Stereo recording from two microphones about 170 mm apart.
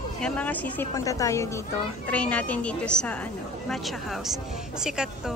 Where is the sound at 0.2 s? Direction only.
10° left (ahead or behind).